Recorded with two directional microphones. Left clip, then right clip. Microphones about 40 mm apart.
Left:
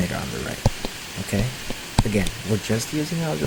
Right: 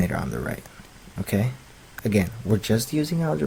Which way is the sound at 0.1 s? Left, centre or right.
Centre.